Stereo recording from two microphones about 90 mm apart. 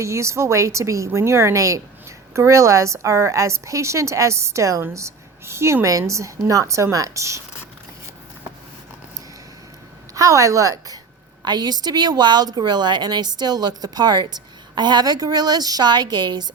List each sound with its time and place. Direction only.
0.0 s a woman's voice: 35° right (ahead or behind)
10.2 s a woman's voice: 35° right (ahead or behind)
11.4 s a woman's voice: 50° right (ahead or behind)